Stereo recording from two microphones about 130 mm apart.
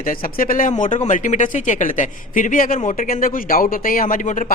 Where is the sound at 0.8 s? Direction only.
75° left (ahead or behind).